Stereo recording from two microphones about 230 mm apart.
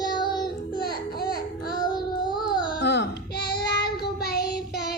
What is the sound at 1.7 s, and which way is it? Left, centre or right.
Child singing, centre.